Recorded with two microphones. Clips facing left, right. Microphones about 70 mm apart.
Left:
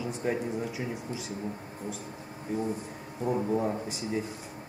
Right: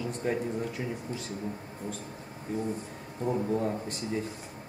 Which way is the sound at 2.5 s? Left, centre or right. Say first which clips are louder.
Left 1 dB; centre.